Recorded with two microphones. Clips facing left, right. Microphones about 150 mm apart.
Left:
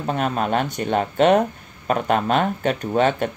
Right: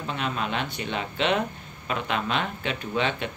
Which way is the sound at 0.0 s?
45° left (ahead or behind).